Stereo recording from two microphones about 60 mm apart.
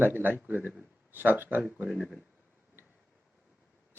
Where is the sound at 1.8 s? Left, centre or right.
Centre.